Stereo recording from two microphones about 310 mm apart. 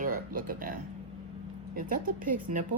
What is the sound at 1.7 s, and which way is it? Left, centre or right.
Speech, right.